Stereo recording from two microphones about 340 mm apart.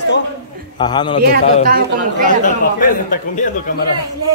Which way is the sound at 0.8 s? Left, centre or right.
Centre.